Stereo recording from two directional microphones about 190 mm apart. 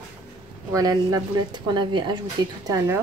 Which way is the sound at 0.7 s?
20° right (ahead or behind).